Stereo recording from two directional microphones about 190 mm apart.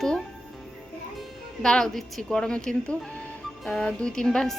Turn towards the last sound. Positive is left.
turn(degrees=5)  # may be behind; listen again after turning